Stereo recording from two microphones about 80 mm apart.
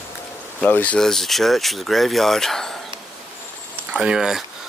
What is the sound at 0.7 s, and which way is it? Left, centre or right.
Speech, centre.